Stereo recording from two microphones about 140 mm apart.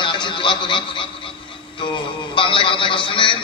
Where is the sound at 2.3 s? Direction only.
40° left (ahead or behind).